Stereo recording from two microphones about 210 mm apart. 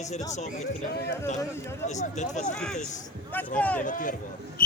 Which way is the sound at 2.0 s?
35° left (ahead or behind).